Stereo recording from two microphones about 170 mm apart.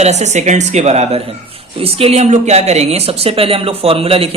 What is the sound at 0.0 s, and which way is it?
Speech, 40° right (ahead or behind).